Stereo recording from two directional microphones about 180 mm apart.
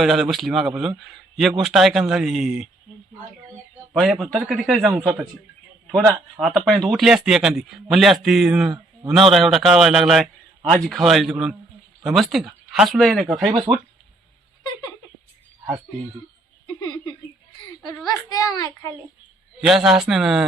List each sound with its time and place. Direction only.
0.0 s speech: centre (ahead or behind)
3.9 s speech: centre (ahead or behind)
4.9 s a man's voice: 15° right (ahead or behind)
5.9 s speech: centre (ahead or behind)
13.7 s speech: 30° right (ahead or behind)
16.6 s a sound: 20° left (ahead or behind)
18.3 s a child's voice: 20° left (ahead or behind)
19.6 s speech: 5° right (ahead or behind)